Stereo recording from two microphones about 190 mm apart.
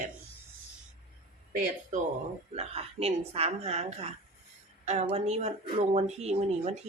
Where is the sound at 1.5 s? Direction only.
40° right (ahead or behind).